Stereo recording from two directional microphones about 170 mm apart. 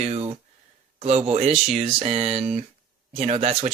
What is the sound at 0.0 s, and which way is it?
A man's voice, 35° right (ahead or behind).